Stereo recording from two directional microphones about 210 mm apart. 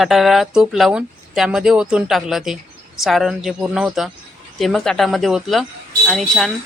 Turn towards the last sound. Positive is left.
turn(degrees=0)  # may be behind; listen again after turning